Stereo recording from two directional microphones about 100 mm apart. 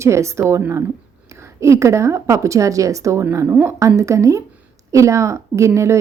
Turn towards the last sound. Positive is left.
turn(degrees=-30)  # may be behind; listen again after turning